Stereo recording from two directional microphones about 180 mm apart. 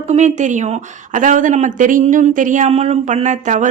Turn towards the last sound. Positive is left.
turn(degrees=-40)  # may be behind; listen again after turning